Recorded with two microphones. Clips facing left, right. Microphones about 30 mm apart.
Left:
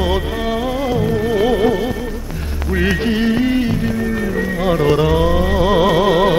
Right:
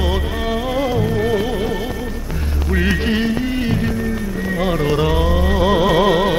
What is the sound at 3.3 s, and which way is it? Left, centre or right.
Music of bollywood, centre.